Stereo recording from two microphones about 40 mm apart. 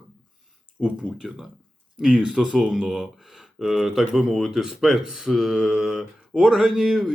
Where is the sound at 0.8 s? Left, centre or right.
Right.